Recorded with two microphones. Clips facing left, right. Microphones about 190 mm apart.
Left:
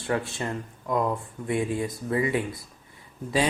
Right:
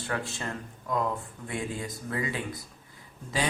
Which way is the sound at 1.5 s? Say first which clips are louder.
Left 8 dB; 25° left (ahead or behind).